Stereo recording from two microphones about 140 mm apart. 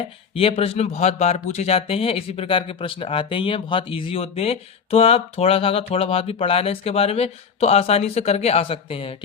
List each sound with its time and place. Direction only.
0.3 s speech: 40° left (ahead or behind)